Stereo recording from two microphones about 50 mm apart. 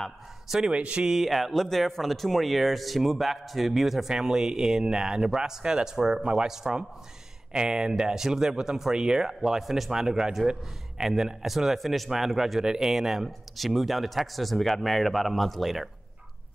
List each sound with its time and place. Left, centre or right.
0.5 s speech: centre
1.0 s speech: centre